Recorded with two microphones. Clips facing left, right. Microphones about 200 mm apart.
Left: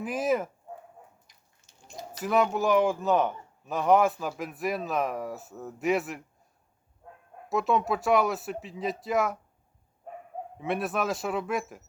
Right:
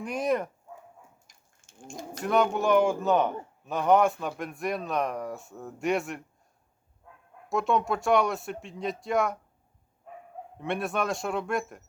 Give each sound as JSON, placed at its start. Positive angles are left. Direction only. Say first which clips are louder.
{"t": 0.0, "sound": "a man's voice", "louder": "left 1 dB", "side_deg": 5}
{"t": 1.3, "sound": "a sound", "louder": "right 3 dB", "side_deg": -50}
{"t": 2.2, "sound": "a man's voice", "louder": "even", "side_deg": 0}
{"t": 7.5, "sound": "a man's voice", "louder": "even", "side_deg": 0}
{"t": 10.6, "sound": "a man's voice", "louder": "even", "side_deg": 0}